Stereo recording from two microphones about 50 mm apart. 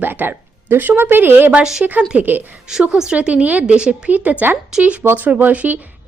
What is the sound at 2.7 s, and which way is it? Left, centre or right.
A woman's voice, centre.